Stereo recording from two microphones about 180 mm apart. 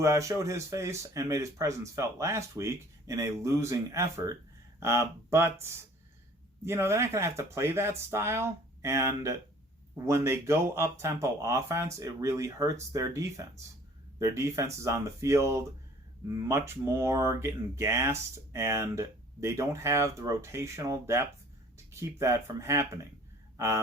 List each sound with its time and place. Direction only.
0.0 s speech: 15° right (ahead or behind)